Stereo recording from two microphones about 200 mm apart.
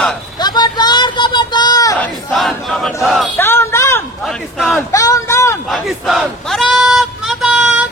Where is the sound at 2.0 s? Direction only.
Centre (ahead or behind).